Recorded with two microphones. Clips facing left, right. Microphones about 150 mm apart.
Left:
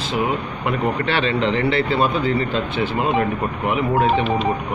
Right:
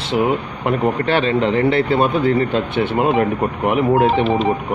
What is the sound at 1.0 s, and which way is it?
Speech, 45° right (ahead or behind).